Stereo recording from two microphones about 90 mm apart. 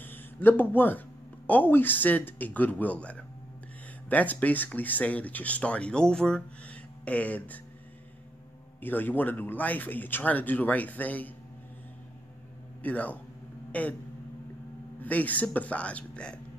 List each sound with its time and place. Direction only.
0.0 s a sound: 20° left (ahead or behind)
1.5 s a man's voice: 20° left (ahead or behind)
8.8 s a man's voice: 20° left (ahead or behind)
12.8 s speech: 15° left (ahead or behind)
13.7 s a sound: 15° left (ahead or behind)
15.0 s speech: 15° left (ahead or behind)